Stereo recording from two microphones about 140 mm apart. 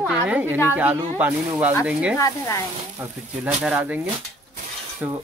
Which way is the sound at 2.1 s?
20° left (ahead or behind).